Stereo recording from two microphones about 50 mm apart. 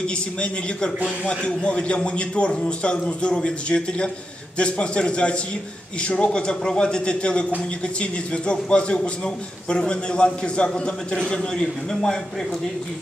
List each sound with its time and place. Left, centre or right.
0.0 s a man's voice: centre